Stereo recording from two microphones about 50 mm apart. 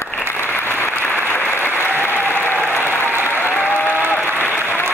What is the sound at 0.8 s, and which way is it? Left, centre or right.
Applause, left.